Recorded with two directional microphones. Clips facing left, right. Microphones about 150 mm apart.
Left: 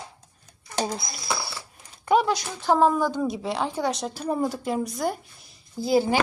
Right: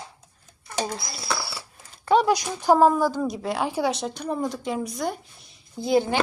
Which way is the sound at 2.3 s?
15° right (ahead or behind).